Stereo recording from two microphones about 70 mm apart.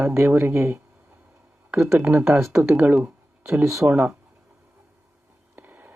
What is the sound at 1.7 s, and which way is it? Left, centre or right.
Speech, right.